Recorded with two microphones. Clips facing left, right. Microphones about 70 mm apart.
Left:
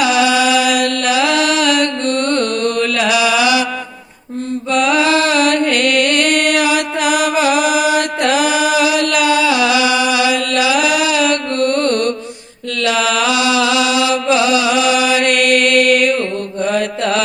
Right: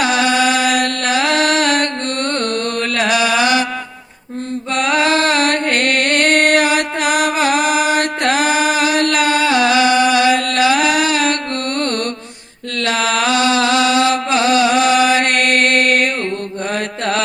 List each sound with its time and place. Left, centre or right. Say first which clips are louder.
0.0 s chant: left 2 dB; right
4.7 s music: left 2 dB; right
12.8 s chant: left 1 dB; right
16.7 s mantra: left 2 dB; right